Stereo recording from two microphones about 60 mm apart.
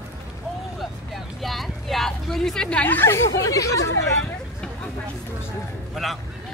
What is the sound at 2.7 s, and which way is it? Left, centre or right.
Speech, left.